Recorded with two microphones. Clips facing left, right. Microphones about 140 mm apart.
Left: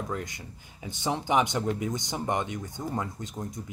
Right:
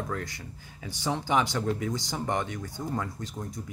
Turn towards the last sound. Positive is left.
turn(degrees=20)  # may be behind; listen again after turning